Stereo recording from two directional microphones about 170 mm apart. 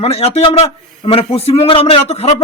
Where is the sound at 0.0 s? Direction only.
35° left (ahead or behind).